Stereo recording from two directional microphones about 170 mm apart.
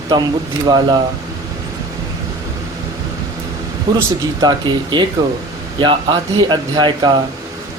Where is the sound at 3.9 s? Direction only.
25° right (ahead or behind).